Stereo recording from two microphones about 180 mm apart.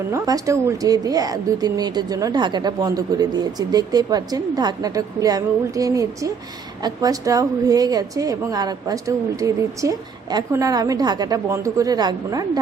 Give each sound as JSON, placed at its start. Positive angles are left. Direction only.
{"t": 0.1, "sound": "speech", "side_deg": -20}